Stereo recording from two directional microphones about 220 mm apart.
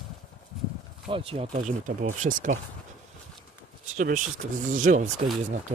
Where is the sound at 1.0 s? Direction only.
25° right (ahead or behind).